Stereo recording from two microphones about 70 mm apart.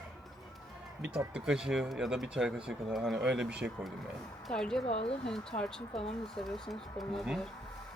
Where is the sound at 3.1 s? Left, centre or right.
Centre.